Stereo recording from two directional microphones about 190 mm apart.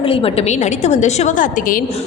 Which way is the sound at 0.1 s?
30° left (ahead or behind).